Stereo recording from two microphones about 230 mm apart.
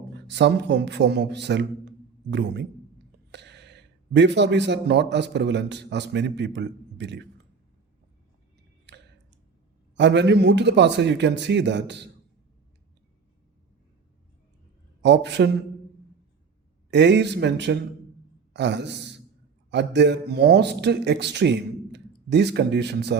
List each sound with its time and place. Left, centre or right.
0.3 s speech: right
9.9 s speech: right
15.0 s speech: right
16.9 s a man's voice: right